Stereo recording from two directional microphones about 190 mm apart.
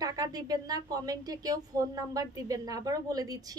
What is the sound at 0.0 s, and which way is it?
A woman's voice, 20° right (ahead or behind).